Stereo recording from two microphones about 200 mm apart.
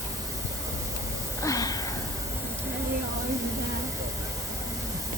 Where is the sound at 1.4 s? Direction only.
15° left (ahead or behind).